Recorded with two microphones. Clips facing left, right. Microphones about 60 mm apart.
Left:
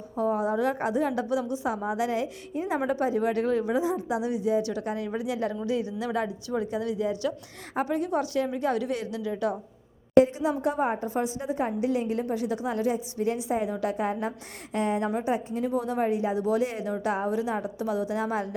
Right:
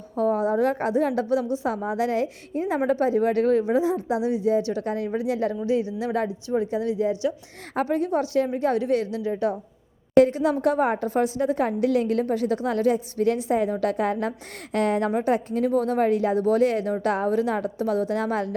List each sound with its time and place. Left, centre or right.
0.2 s a woman's voice: right
7.8 s a woman's voice: right
10.2 s a woman's voice: right